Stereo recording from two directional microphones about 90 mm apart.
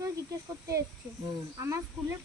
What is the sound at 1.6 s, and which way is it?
Speech, 30° right (ahead or behind).